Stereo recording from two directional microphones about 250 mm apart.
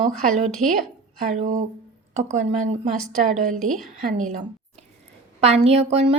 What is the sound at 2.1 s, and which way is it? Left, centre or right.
Speech, right.